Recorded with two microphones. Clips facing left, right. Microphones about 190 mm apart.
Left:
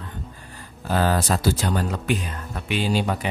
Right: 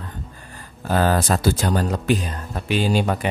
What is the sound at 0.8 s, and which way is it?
Speech, 50° right (ahead or behind).